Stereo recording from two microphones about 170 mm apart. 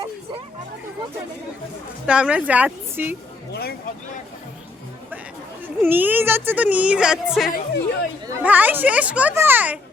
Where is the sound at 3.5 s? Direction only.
65° left (ahead or behind).